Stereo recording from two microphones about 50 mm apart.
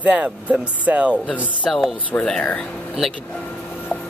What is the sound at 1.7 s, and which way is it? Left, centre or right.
Speech, centre.